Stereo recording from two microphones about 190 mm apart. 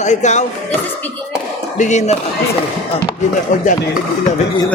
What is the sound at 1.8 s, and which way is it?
Speech, 40° left (ahead or behind).